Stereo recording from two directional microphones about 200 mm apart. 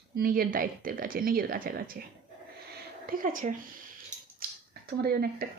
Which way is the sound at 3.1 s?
45° right (ahead or behind).